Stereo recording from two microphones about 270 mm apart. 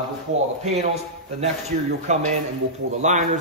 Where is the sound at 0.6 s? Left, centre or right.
Right.